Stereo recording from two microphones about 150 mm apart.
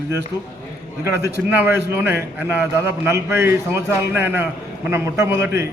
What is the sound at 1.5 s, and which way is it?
A man's voice, 15° right (ahead or behind).